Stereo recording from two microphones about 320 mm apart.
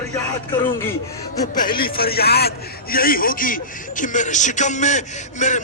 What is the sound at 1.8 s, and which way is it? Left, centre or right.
A man's voice, left.